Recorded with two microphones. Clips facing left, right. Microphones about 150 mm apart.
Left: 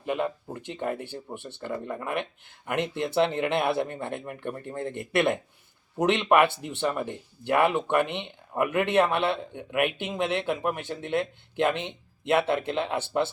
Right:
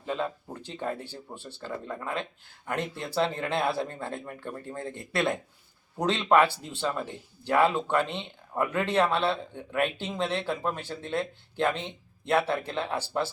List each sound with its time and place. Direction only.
0.0 s speech: 15° left (ahead or behind)